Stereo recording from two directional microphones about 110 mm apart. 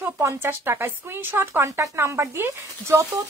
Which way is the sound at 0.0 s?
20° right (ahead or behind).